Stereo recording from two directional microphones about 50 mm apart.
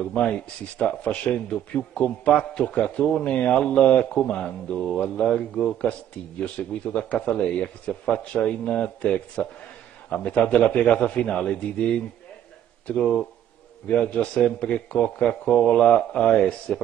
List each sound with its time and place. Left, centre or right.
0.1 s speech: left
4.7 s speech: centre
5.0 s speech: left